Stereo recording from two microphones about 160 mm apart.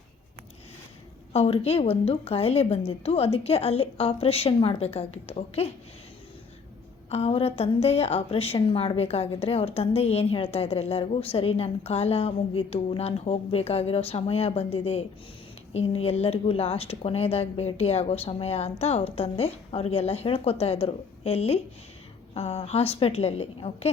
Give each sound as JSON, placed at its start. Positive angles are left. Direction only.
{"t": 1.3, "sound": "a woman's voice", "side_deg": 40}
{"t": 7.1, "sound": "a woman's voice", "side_deg": 40}